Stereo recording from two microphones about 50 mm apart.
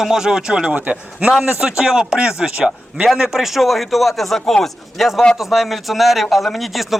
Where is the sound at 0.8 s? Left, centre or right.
Right.